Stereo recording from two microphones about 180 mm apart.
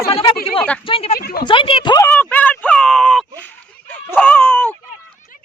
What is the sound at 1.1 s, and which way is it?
Speech, 55° left (ahead or behind).